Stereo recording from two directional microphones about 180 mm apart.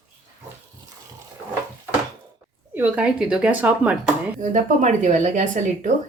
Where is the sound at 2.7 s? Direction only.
10° right (ahead or behind).